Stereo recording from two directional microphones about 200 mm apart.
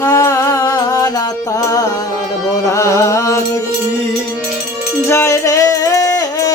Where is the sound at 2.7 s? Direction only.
15° left (ahead or behind).